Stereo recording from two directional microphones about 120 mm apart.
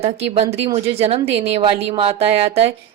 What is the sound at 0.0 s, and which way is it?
Speech, 60° right (ahead or behind).